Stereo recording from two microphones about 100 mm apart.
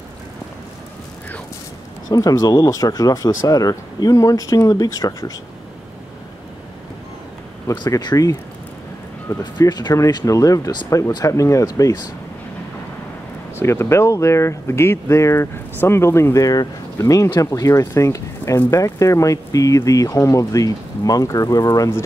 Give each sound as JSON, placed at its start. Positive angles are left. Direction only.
{"t": 2.0, "sound": "speech", "side_deg": 35}
{"t": 8.0, "sound": "speech", "side_deg": 40}
{"t": 9.4, "sound": "speech", "side_deg": 45}
{"t": 13.6, "sound": "speech", "side_deg": 25}